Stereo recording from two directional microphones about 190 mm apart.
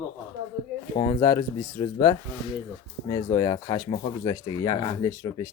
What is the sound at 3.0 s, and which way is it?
Speech, 20° left (ahead or behind).